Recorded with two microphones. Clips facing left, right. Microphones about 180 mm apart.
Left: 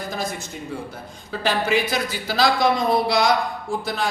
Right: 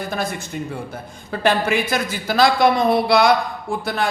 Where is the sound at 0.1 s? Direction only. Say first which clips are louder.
Right 3 dB; 60° right (ahead or behind).